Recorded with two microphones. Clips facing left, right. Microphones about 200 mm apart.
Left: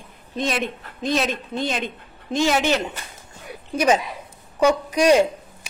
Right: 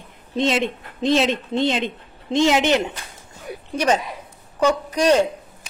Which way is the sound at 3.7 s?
10° left (ahead or behind).